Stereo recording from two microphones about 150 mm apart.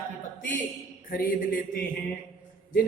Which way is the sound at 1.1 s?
75° left (ahead or behind).